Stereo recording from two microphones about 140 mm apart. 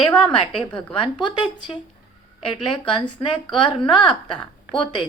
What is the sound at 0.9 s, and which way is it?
A woman's voice, 35° left (ahead or behind).